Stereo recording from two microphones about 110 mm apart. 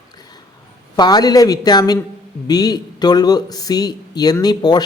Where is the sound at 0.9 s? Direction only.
40° left (ahead or behind).